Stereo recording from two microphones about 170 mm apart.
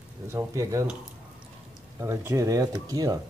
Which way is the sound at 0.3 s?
15° right (ahead or behind).